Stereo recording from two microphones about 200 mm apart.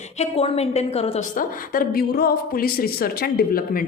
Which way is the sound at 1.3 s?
45° left (ahead or behind).